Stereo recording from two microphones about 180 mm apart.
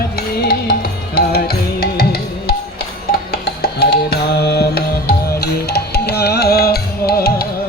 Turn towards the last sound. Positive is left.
turn(degrees=60)  # may be behind; listen again after turning